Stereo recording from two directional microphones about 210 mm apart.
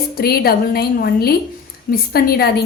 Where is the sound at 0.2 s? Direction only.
45° left (ahead or behind).